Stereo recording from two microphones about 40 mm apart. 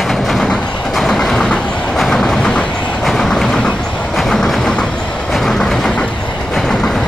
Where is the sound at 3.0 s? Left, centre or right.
Centre.